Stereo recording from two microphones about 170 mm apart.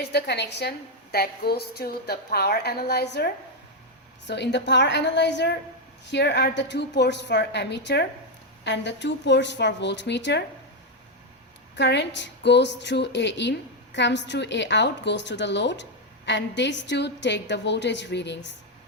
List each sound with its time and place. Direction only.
0.0 s a woman's voice: 75° left (ahead or behind)
4.3 s a woman's voice: 90° left
11.8 s a woman's voice: 90° left